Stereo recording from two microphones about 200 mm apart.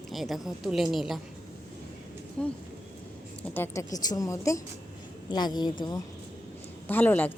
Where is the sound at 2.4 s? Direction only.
5° left (ahead or behind); by 6.0 s 20° left (ahead or behind).